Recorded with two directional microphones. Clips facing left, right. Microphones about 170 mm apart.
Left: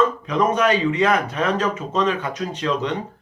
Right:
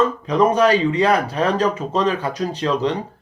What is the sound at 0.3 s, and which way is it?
Speech, 35° right (ahead or behind).